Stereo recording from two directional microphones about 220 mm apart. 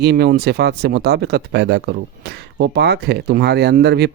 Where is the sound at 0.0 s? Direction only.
50° right (ahead or behind).